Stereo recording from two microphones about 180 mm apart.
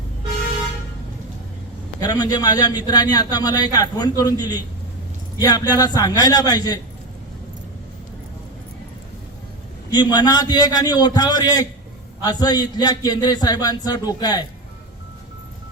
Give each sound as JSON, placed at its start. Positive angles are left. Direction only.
{"t": 2.0, "sound": "a man's voice", "side_deg": 20}
{"t": 9.9, "sound": "a man's voice", "side_deg": 25}